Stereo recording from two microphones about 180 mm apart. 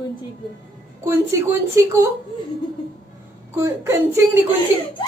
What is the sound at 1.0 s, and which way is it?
Speech, 15° right (ahead or behind).